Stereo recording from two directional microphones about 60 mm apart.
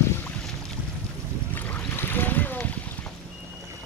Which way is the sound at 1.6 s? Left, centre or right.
Left.